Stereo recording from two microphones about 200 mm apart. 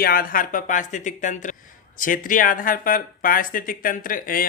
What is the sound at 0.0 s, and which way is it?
Speech, 45° left (ahead or behind).